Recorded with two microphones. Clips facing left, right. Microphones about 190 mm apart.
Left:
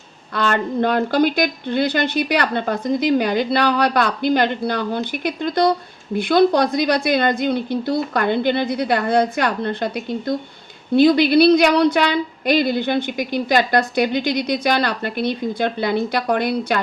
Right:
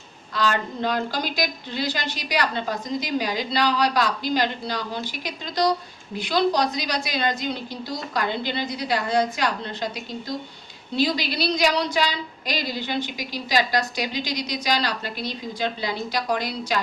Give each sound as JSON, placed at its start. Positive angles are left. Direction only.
{"t": 0.3, "sound": "speech", "side_deg": 60}